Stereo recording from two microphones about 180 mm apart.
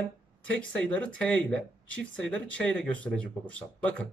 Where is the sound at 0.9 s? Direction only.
5° left (ahead or behind).